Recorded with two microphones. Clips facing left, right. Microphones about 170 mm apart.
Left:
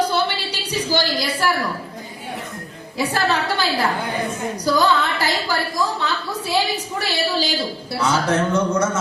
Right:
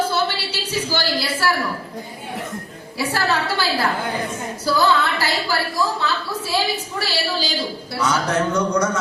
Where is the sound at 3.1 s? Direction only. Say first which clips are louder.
Even; 20° left (ahead or behind).